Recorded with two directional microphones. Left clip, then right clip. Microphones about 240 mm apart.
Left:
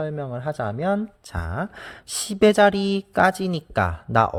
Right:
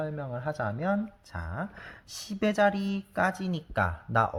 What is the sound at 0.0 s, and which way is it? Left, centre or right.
Speech, left.